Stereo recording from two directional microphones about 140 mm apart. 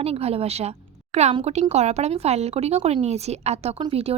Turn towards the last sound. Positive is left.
turn(degrees=-40)  # may be behind; listen again after turning